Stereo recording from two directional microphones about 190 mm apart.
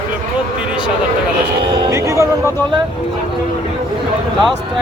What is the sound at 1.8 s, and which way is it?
Speech, 15° right (ahead or behind).